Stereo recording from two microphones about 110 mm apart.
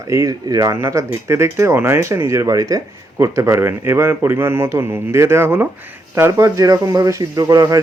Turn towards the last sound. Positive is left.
turn(degrees=-30)  # may be behind; listen again after turning